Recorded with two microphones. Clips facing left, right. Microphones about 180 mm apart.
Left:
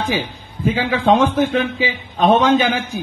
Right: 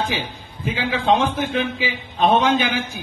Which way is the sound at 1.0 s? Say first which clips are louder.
Left 5 dB; 50° left (ahead or behind).